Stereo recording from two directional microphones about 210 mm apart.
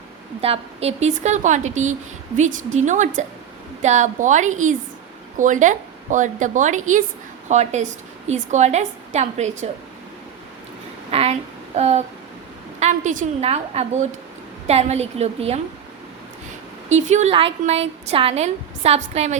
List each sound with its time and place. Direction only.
0.4 s a woman's voice: 30° right (ahead or behind)
11.1 s a sound: 30° right (ahead or behind)
11.8 s a woman's voice: 30° right (ahead or behind)
16.9 s a woman's voice: 35° right (ahead or behind)